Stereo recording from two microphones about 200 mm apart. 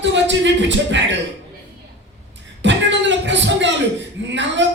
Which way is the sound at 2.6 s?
65° right (ahead or behind).